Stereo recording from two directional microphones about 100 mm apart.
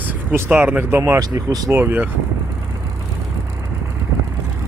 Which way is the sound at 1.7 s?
20° right (ahead or behind).